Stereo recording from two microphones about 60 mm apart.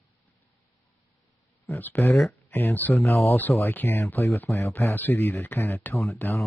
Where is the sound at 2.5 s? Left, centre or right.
Left.